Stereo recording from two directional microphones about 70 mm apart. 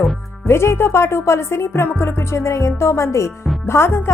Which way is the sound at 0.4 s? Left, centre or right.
Left.